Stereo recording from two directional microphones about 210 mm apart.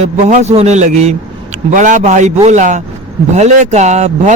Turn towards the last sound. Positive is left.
turn(degrees=-35)  # may be behind; listen again after turning